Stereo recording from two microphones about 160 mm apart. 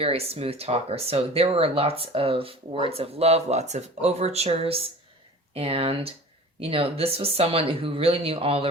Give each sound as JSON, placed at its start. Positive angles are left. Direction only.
{"t": 0.0, "sound": "speech", "side_deg": -40}